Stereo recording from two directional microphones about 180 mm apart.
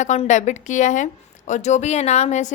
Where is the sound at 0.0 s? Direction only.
40° left (ahead or behind).